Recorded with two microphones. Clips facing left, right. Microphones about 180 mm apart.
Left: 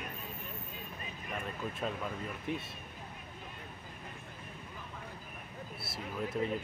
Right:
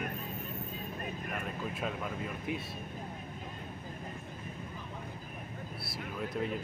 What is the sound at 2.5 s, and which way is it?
Speech, 5° right (ahead or behind).